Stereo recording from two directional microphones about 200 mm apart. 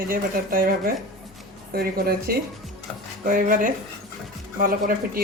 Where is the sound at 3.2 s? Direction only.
45° right (ahead or behind).